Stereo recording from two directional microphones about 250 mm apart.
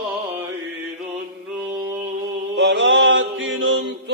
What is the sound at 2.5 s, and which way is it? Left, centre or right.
Mantra, right.